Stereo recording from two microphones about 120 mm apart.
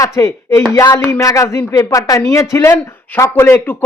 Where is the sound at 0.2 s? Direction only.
30° left (ahead or behind).